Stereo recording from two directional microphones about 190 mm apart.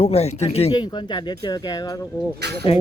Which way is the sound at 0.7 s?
20° left (ahead or behind).